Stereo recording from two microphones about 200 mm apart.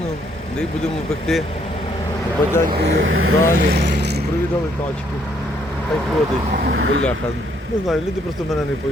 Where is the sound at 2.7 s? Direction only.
30° right (ahead or behind).